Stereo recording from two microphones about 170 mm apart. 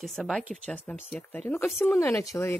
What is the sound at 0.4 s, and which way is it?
Speech, 50° right (ahead or behind).